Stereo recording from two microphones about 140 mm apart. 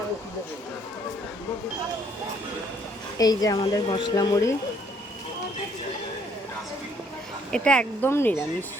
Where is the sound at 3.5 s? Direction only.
40° left (ahead or behind); by 4.6 s 25° left (ahead or behind).